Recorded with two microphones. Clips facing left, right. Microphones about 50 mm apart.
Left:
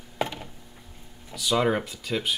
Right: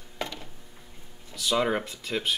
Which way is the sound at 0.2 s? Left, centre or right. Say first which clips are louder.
Left 5 dB; centre.